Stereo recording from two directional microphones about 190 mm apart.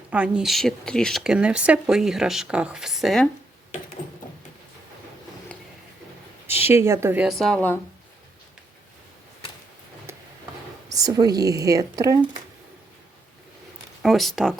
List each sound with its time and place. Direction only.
0.1 s speech: 5° right (ahead or behind)
6.6 s a woman's voice: 10° right (ahead or behind); by 7.8 s 5° left (ahead or behind)
10.1 s tick-tock: 15° right (ahead or behind)
10.9 s speech: 20° right (ahead or behind)
14.0 s speech: centre (ahead or behind)